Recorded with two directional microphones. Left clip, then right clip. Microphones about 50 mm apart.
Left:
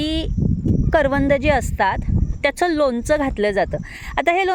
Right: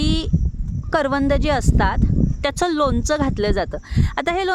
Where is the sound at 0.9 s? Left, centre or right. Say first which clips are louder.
Left 2 dB; right.